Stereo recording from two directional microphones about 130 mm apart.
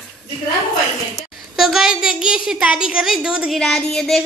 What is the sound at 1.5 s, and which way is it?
A woman's voice, centre (ahead or behind).